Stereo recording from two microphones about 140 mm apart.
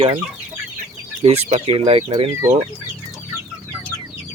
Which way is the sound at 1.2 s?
45° right (ahead or behind).